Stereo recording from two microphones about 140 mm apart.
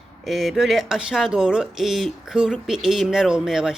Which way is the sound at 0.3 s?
Centre (ahead or behind).